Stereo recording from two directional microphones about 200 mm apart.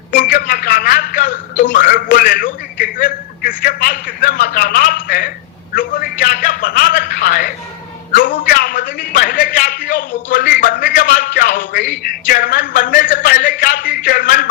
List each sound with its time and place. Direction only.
0.1 s music: 45° left (ahead or behind)
1.7 s a man's voice: 45° left (ahead or behind)